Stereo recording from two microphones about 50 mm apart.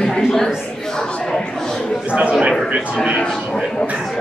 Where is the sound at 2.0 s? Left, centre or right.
Right.